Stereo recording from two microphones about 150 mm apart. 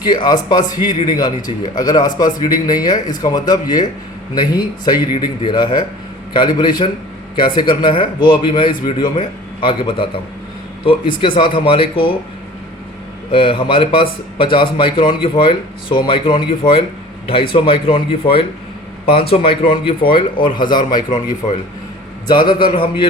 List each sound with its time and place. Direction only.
0.0 s a man's voice: 30° left (ahead or behind)
13.3 s speech: 35° left (ahead or behind)